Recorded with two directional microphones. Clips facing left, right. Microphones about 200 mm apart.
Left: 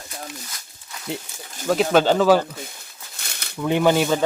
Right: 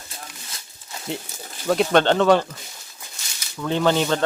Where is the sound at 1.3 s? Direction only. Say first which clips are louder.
Right 2 dB; 35° right (ahead or behind).